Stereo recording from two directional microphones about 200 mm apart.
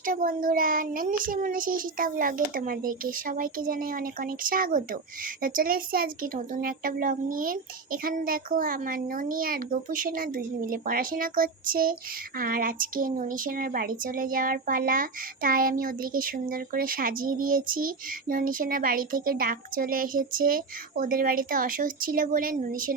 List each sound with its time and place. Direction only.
0.0 s a child's voice: 45° right (ahead or behind)